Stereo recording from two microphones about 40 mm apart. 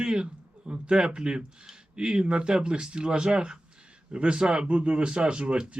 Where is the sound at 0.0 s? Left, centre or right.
Right.